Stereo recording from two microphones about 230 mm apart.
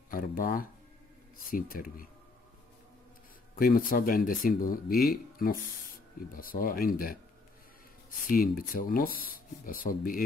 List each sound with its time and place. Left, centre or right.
0.1 s speech: left
3.5 s speech: left
8.3 s speech: left